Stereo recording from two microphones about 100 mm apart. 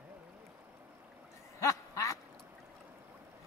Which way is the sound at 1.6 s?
30° left (ahead or behind).